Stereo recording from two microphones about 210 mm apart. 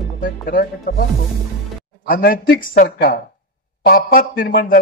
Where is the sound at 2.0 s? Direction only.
45° left (ahead or behind).